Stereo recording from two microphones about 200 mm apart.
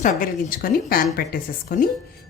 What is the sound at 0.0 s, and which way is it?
A woman's voice, 45° left (ahead or behind).